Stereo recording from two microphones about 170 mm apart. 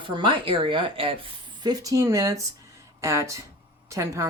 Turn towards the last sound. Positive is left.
turn(degrees=-20)  # may be behind; listen again after turning